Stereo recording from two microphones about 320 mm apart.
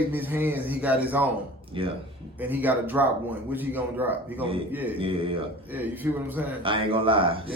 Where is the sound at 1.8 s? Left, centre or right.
Centre.